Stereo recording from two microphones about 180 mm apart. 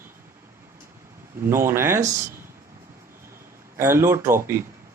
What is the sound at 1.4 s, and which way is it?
Speech, 15° right (ahead or behind).